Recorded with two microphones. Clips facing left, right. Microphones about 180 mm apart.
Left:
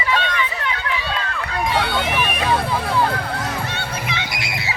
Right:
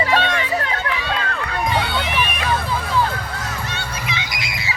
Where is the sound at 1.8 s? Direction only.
45° left (ahead or behind).